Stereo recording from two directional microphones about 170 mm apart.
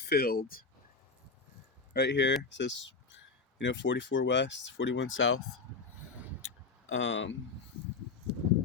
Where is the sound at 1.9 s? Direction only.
80° left.